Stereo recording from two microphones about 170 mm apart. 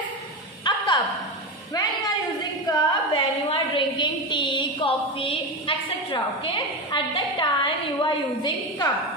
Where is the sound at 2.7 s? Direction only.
30° left (ahead or behind).